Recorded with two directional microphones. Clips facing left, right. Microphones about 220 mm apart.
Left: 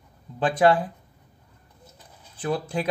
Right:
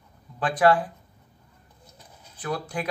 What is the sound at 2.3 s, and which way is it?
Speech, 25° left (ahead or behind).